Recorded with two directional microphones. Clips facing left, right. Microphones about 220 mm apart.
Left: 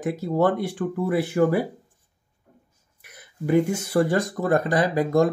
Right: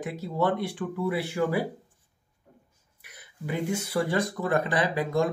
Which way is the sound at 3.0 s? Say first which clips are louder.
Left 9 dB; 45° left (ahead or behind).